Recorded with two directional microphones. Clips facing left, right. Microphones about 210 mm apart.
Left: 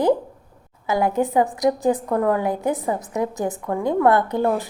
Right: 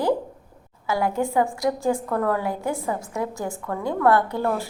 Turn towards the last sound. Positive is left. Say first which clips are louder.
# left 3 dB
turn(degrees=20)  # may be behind; listen again after turning